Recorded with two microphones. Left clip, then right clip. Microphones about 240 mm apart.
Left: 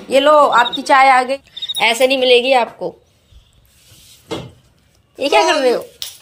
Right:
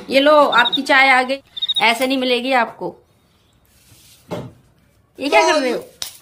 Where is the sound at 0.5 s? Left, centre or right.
Right.